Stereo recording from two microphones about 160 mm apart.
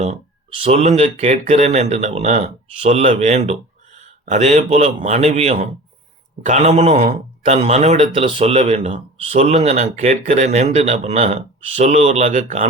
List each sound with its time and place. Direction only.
0.6 s speech: 40° right (ahead or behind)